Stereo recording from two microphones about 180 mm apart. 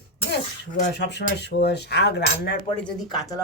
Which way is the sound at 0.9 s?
70° left (ahead or behind).